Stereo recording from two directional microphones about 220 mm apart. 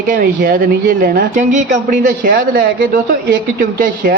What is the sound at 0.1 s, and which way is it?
A woman's voice, 40° right (ahead or behind).